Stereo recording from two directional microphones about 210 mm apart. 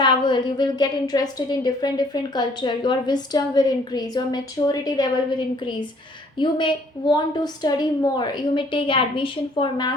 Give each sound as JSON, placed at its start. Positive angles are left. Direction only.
{"t": 0.0, "sound": "a woman's voice", "side_deg": 20}
{"t": 6.3, "sound": "a woman's voice", "side_deg": 20}